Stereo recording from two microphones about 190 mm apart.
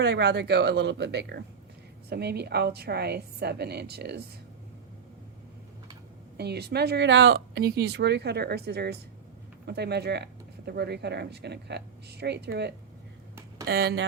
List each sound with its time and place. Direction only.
0.0 s speech: 60° right (ahead or behind)
6.3 s speech: 60° right (ahead or behind)